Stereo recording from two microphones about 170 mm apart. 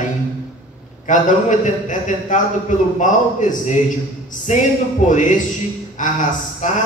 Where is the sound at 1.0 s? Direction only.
45° left (ahead or behind).